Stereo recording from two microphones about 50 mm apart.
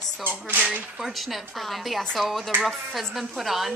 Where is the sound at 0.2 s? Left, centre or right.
Right.